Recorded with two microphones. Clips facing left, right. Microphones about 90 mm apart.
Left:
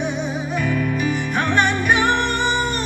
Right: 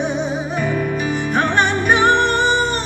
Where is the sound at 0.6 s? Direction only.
25° right (ahead or behind).